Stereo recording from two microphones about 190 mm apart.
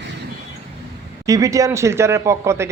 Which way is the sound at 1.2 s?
15° right (ahead or behind).